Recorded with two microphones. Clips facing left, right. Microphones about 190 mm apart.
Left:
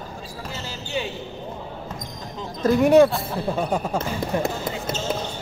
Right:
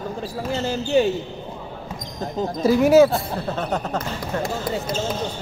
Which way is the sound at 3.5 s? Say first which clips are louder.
Left 2 dB; 10° left (ahead or behind).